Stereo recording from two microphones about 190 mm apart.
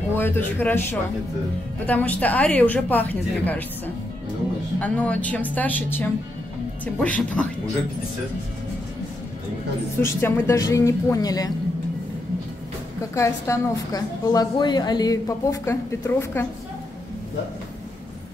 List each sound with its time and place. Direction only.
0.1 s a woman's voice: 10° left (ahead or behind)
10.0 s a woman's voice: 10° left (ahead or behind)
13.1 s a woman's voice: 15° left (ahead or behind)